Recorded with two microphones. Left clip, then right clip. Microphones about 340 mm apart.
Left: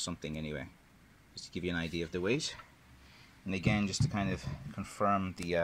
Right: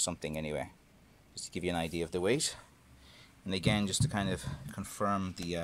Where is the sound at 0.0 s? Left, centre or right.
Centre.